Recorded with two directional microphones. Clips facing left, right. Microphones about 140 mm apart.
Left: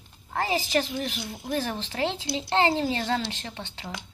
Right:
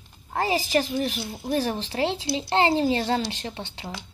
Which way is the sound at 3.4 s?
25° right (ahead or behind).